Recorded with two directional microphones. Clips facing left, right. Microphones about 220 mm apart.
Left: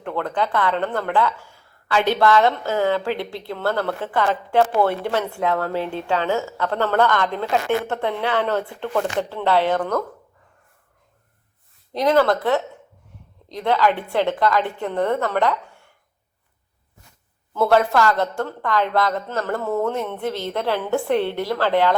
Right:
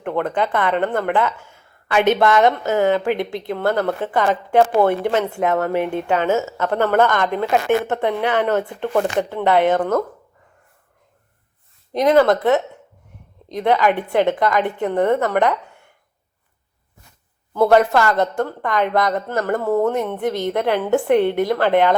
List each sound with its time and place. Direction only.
0.0 s speech: 20° right (ahead or behind)
11.9 s a woman's voice: 20° right (ahead or behind)
17.5 s speech: 15° right (ahead or behind)